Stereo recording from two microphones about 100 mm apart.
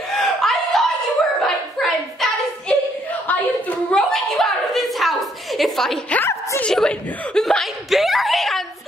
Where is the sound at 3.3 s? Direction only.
15° left (ahead or behind).